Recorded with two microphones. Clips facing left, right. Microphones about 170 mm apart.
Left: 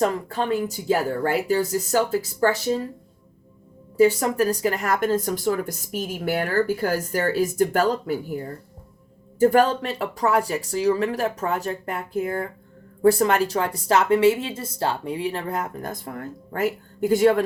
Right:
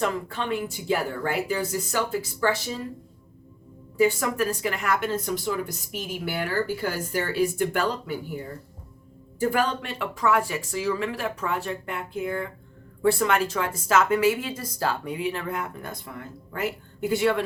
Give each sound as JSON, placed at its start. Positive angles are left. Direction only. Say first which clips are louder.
{"t": 0.0, "sound": "a woman's voice", "louder": "left 4 dB", "side_deg": 40}
{"t": 3.9, "sound": "a woman's voice", "louder": "left 4 dB", "side_deg": 40}